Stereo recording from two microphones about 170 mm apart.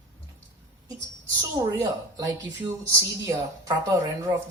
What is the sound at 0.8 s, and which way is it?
Music, 20° right (ahead or behind).